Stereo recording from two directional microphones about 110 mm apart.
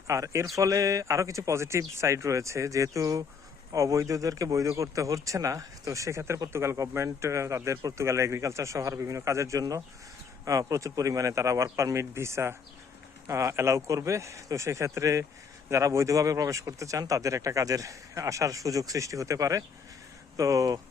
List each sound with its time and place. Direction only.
0.1 s speech: 30° right (ahead or behind)